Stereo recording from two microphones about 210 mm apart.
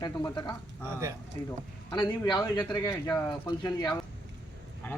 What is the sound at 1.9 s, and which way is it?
Speech, 20° left (ahead or behind).